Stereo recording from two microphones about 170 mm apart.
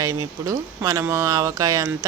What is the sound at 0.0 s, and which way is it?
Speech, 20° right (ahead or behind).